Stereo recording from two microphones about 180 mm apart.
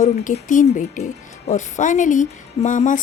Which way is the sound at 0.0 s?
40° left (ahead or behind).